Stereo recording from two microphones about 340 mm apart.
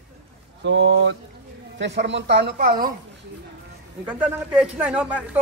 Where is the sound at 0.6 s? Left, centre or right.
Right.